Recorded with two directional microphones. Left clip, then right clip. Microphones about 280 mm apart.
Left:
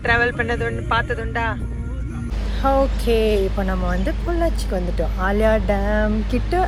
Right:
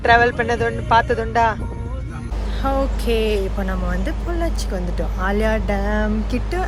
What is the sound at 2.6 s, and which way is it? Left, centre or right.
Speech, centre.